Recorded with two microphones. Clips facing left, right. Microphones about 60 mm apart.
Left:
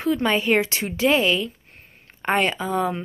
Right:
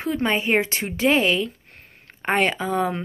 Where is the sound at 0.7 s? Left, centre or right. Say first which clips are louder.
Even; right.